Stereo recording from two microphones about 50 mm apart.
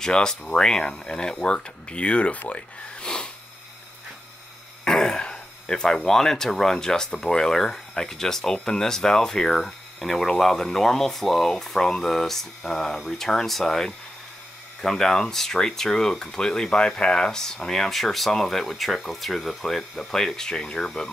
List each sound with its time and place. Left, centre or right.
0.0 s speech: centre
4.8 s throat clearing: centre
6.0 s speech: centre